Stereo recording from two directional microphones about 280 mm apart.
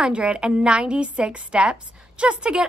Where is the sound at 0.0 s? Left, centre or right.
Centre.